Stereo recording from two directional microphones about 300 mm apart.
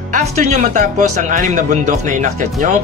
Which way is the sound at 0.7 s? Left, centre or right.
Right.